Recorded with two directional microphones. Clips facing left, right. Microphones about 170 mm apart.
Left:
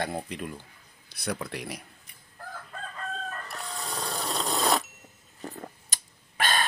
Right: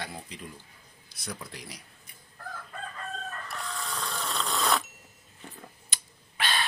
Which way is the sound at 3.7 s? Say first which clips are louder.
Left 2 dB; 30° left (ahead or behind).